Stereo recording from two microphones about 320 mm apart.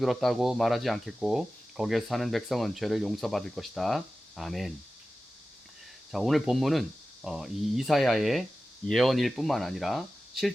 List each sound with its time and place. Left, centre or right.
0.0 s speech: centre
6.1 s speech: centre